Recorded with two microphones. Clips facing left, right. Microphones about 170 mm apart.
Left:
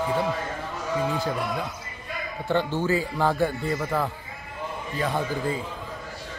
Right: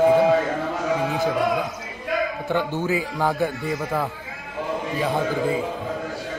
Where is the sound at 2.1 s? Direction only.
90° right.